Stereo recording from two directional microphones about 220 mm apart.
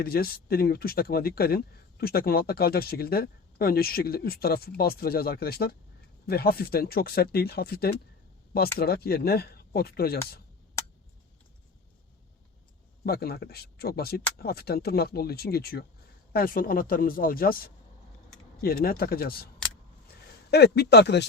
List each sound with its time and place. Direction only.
0.0 s speech: 45° left (ahead or behind)
13.1 s speech: 45° left (ahead or behind)
20.5 s speech: 45° left (ahead or behind)